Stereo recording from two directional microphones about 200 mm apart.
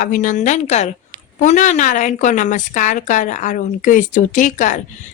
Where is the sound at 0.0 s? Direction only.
40° left (ahead or behind).